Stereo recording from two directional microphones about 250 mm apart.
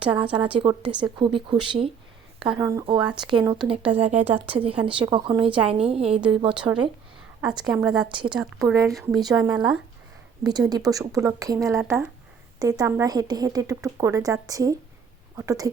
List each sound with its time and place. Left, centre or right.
0.0 s a woman's voice: right
0.9 s a woman's voice: centre
1.2 s a woman's voice: centre
6.5 s a woman's voice: centre
9.5 s a woman's voice: centre